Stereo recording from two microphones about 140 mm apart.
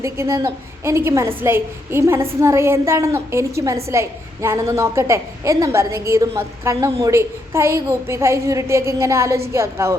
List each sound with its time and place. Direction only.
0.0 s a woman's voice: 20° right (ahead or behind)